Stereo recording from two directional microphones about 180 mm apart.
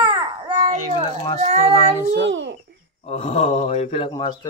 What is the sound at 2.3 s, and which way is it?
Speech, 80° right.